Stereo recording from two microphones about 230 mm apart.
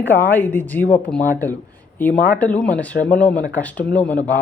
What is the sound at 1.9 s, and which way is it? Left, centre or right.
Speech, centre.